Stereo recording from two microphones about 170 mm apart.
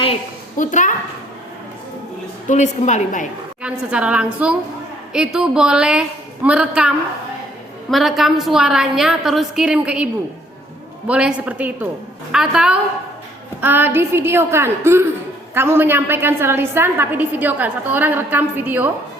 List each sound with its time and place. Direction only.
0.5 s a woman's voice: 50° left (ahead or behind)
2.5 s a woman's voice: 45° left (ahead or behind)
3.6 s a woman's voice: 5° right (ahead or behind)